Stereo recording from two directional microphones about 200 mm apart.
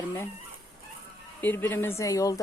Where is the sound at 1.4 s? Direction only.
10° left (ahead or behind).